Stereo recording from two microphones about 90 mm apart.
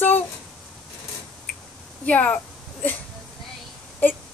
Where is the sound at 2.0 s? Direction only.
15° left (ahead or behind).